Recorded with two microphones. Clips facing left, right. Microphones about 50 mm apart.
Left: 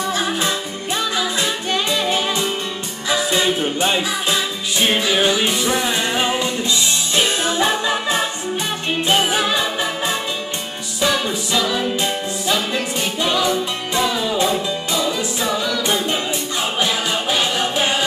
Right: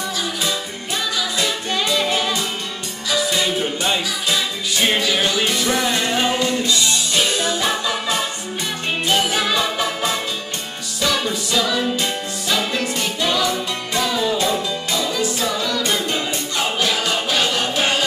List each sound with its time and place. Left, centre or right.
0.1 s music: left